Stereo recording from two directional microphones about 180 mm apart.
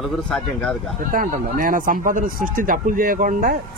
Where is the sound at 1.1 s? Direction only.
50° right (ahead or behind).